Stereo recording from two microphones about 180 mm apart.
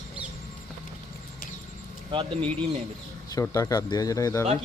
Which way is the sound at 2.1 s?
30° right (ahead or behind).